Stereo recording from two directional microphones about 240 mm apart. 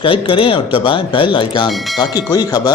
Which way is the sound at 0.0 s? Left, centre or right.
Left.